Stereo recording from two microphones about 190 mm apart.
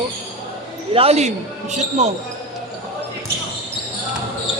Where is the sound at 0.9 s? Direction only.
35° right (ahead or behind).